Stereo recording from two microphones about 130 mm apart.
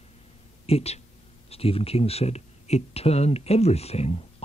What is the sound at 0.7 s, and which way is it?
Speech, 50° left (ahead or behind).